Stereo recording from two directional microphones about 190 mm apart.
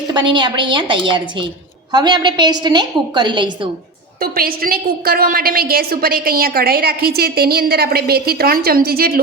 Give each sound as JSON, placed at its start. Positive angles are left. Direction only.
{"t": 0.1, "sound": "a woman's voice", "side_deg": -25}
{"t": 4.2, "sound": "a woman's voice", "side_deg": -50}